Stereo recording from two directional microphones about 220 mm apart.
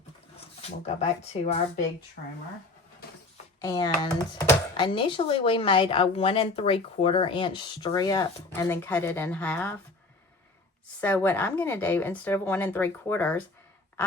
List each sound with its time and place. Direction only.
0.3 s speech: 30° left (ahead or behind)
3.6 s speech: 15° left (ahead or behind)
11.0 s speech: 10° left (ahead or behind)